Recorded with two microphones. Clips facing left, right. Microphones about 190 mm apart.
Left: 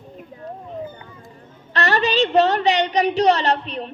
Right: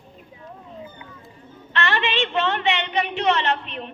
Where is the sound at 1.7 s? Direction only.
40° left (ahead or behind).